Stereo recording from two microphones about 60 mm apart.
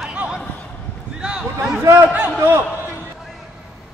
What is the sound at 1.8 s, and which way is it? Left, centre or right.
Speech, right.